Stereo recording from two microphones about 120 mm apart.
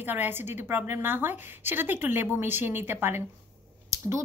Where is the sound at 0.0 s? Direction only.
15° right (ahead or behind).